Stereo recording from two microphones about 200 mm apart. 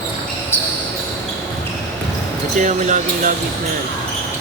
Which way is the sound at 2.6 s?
40° right (ahead or behind).